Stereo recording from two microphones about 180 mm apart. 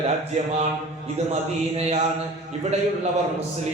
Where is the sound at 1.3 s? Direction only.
35° right (ahead or behind).